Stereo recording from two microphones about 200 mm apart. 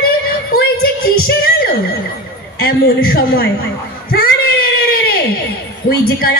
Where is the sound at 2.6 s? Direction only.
50° left (ahead or behind).